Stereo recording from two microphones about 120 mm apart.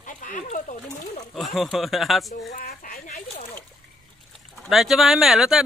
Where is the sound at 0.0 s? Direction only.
90° left.